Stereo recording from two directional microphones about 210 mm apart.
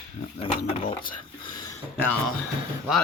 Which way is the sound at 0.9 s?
25° left (ahead or behind).